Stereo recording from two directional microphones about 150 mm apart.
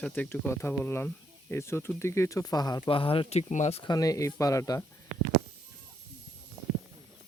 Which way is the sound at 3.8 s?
25° left (ahead or behind).